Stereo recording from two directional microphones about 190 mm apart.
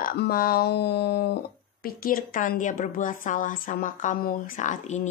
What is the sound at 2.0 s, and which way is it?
A woman's voice, 50° left (ahead or behind).